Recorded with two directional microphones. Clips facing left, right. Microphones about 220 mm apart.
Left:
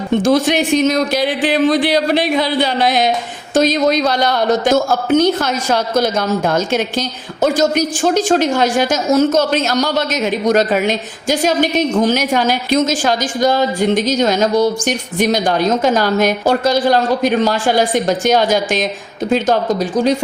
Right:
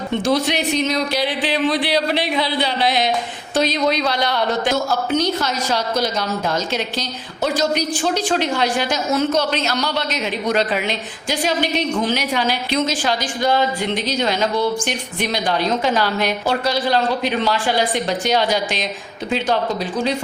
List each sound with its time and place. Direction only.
0.3 s a woman's voice: 50° left (ahead or behind)